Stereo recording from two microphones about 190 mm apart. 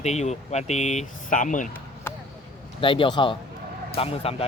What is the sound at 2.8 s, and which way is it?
Speech, 25° left (ahead or behind).